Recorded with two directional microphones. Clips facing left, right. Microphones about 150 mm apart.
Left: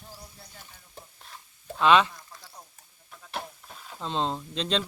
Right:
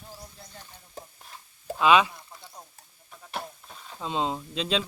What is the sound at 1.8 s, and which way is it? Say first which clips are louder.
Speech: even; 10° right (ahead or behind).